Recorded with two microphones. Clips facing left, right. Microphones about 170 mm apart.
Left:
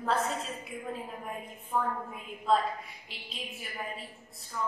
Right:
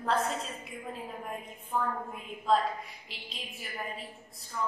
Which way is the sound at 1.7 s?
5° left (ahead or behind).